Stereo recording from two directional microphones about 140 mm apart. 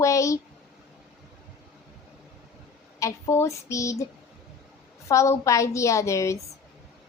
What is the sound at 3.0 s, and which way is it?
A woman's voice, 20° left (ahead or behind).